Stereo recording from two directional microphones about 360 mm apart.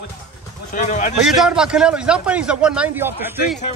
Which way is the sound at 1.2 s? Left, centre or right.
Centre.